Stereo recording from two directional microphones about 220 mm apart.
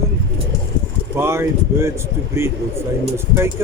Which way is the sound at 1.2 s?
10° right (ahead or behind).